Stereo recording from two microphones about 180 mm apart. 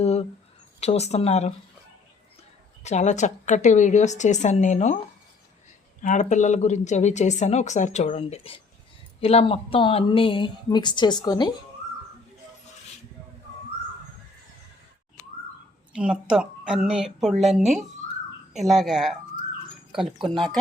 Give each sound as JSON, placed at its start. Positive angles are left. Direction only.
{"t": 0.0, "sound": "a sound", "side_deg": 35}
{"t": 0.8, "sound": "speech", "side_deg": 35}
{"t": 2.8, "sound": "speech", "side_deg": 40}
{"t": 6.0, "sound": "a woman's voice", "side_deg": 45}
{"t": 16.0, "sound": "a woman's voice", "side_deg": -5}
{"t": 20.2, "sound": "a woman's voice", "side_deg": 0}